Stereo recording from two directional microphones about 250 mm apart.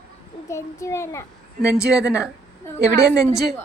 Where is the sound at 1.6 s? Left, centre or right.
Centre.